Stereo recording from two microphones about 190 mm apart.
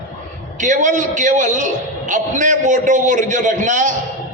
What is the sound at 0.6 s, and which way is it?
A man's voice, 40° right (ahead or behind).